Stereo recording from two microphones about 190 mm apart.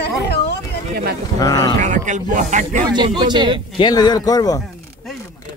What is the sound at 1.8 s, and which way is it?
Speech, 40° right (ahead or behind).